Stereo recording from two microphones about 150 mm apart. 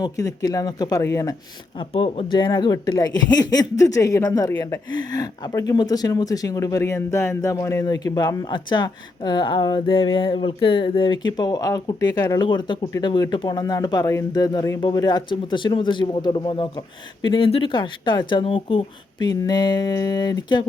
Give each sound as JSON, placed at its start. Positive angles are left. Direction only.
{"t": 0.0, "sound": "speech", "side_deg": 25}
{"t": 1.8, "sound": "speech", "side_deg": 35}